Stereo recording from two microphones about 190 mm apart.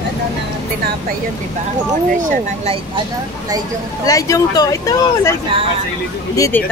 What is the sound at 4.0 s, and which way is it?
Speech, 20° left (ahead or behind).